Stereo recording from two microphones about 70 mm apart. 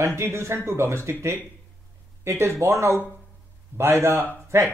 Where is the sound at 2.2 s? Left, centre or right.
Right.